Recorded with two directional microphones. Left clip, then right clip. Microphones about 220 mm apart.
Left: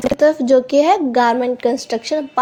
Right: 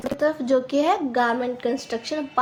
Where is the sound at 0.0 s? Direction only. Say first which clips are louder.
Left 9 dB; 30° left (ahead or behind).